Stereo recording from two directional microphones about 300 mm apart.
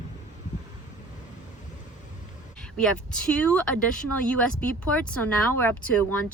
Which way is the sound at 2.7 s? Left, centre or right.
Centre.